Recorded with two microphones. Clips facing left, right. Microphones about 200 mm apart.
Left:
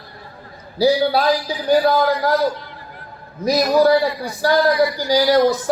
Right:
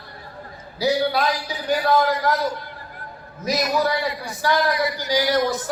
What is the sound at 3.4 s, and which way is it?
A man's voice, 35° left (ahead or behind).